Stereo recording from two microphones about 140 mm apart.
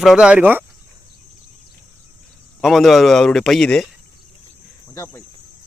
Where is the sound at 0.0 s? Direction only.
5° right (ahead or behind).